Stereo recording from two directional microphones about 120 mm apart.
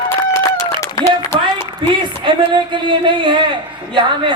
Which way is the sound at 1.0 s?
30° left (ahead or behind).